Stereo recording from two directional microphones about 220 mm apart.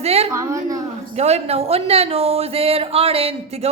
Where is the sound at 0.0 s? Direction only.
30° right (ahead or behind).